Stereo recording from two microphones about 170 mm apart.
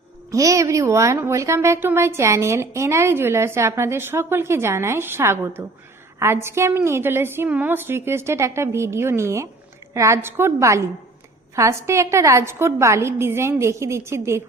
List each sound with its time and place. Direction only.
0.3 s a woman's voice: 20° right (ahead or behind)